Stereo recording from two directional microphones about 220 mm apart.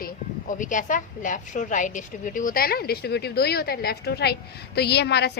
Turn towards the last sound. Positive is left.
turn(degrees=50)  # may be behind; listen again after turning